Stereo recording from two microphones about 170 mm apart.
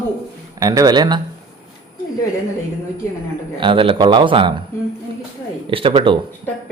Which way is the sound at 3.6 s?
30° right (ahead or behind).